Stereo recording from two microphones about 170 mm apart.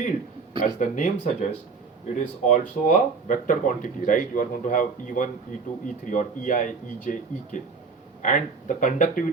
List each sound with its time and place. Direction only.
0.6 s speech: 50° left (ahead or behind)